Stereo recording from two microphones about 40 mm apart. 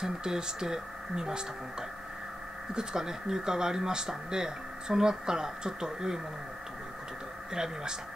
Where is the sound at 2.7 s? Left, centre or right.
Centre.